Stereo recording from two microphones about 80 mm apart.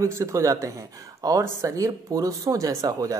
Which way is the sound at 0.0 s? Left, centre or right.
Right.